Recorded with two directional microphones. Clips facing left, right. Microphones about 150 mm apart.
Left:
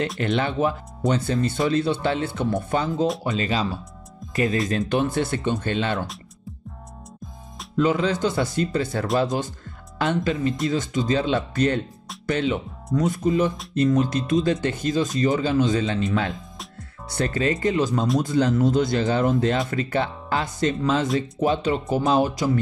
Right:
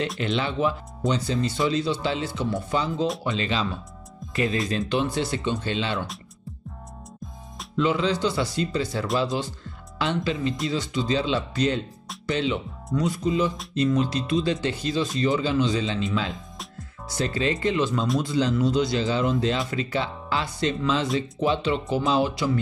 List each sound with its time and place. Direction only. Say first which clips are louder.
0.2 s speech: left 3 dB; 50° left (ahead or behind)
3.3 s speech: left 2 dB; 40° left (ahead or behind)
7.7 s speech: left 2 dB; 45° left (ahead or behind)